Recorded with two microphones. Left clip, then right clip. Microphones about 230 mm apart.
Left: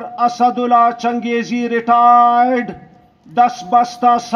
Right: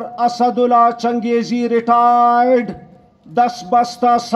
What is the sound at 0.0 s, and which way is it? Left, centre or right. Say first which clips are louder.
Speech: left 1 dB; right.